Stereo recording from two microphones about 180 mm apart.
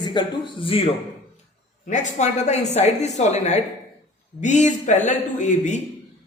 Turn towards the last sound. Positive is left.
turn(degrees=40)  # may be behind; listen again after turning